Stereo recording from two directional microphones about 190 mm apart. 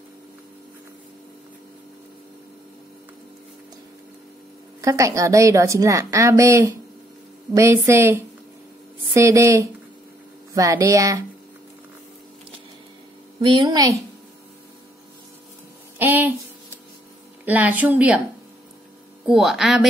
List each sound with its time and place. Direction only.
4.8 s a woman's voice: 15° right (ahead or behind)
13.4 s a woman's voice: 25° right (ahead or behind)
16.0 s a woman's voice: 10° right (ahead or behind)
17.5 s a woman's voice: 10° right (ahead or behind)
19.2 s speech: centre (ahead or behind)